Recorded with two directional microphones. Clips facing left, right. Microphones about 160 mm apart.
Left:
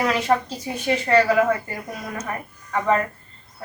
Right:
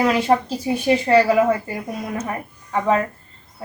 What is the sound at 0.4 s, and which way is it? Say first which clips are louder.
A woman's voice: right 6 dB; 20° right (ahead or behind).